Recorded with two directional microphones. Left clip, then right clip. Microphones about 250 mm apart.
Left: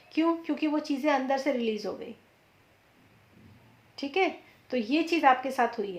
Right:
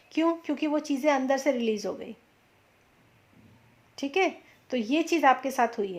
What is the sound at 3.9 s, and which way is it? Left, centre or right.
Speech, right.